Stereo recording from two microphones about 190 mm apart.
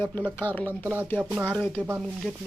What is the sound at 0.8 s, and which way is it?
Speech, 10° right (ahead or behind).